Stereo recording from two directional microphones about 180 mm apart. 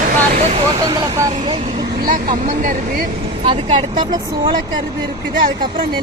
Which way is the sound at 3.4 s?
30° right (ahead or behind).